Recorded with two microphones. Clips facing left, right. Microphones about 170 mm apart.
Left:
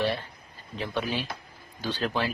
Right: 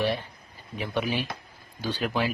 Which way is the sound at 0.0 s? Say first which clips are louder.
Right 1 dB; 15° right (ahead or behind).